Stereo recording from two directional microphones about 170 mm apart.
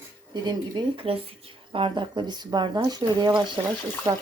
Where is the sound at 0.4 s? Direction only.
25° right (ahead or behind).